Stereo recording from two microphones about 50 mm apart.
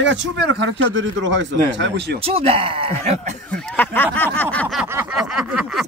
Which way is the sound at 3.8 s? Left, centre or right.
Left.